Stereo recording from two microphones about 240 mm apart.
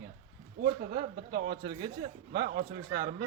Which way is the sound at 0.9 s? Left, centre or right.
Right.